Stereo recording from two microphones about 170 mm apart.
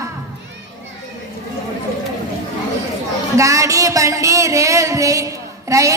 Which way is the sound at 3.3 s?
20° right (ahead or behind).